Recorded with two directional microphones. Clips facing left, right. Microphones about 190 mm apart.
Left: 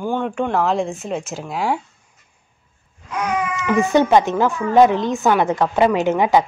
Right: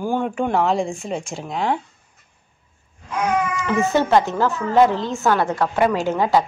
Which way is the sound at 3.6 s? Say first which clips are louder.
Left 7 dB; 15° left (ahead or behind).